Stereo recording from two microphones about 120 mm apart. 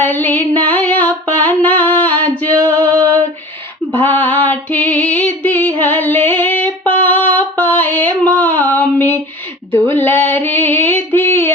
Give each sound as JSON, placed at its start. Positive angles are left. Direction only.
{"t": 0.0, "sound": "female singing", "side_deg": 15}
{"t": 3.9, "sound": "female singing", "side_deg": 15}